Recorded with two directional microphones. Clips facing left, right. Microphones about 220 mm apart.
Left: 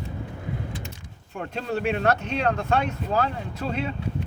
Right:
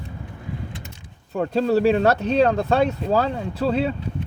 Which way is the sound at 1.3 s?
35° right (ahead or behind).